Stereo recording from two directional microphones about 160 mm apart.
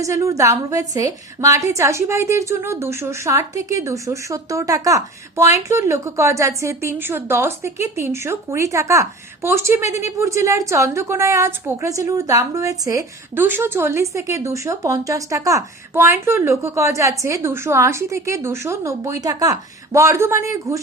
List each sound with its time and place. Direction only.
0.0 s a woman's voice: 20° right (ahead or behind)